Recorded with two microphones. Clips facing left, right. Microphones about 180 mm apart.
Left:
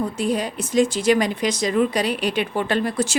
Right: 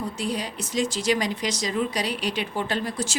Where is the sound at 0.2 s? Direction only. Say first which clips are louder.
Left 6 dB; 50° left (ahead or behind).